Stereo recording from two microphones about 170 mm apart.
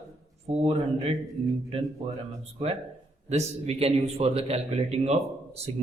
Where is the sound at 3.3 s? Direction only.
40° right (ahead or behind).